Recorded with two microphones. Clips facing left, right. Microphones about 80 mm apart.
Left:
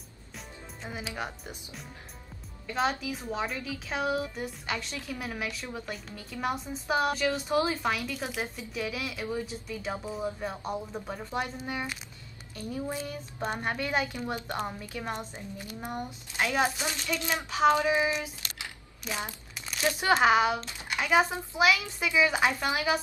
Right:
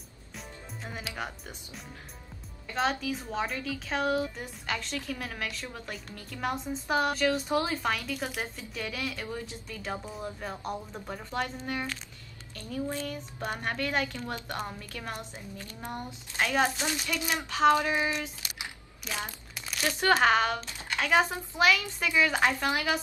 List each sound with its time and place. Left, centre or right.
1.0 s a woman's voice: centre
15.1 s a woman's voice: left
16.3 s speech: centre
16.9 s speech: centre
17.5 s speech: centre
18.4 s a sound: centre
19.0 s speech: centre